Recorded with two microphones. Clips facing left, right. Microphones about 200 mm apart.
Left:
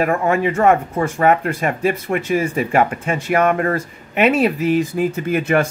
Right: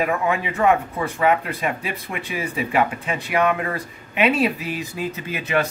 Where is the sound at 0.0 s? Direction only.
50° left (ahead or behind).